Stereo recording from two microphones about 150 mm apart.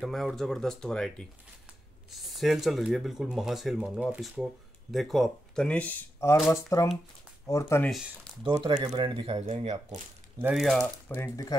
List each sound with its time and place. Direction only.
0.0 s speech: centre (ahead or behind)
2.2 s speech: centre (ahead or behind); by 7.9 s 15° left (ahead or behind)
7.9 s speech: centre (ahead or behind)
8.5 s speech: 30° right (ahead or behind)
9.0 s speech: 35° right (ahead or behind)
10.4 s speech: centre (ahead or behind)
11.1 s speech: 20° left (ahead or behind)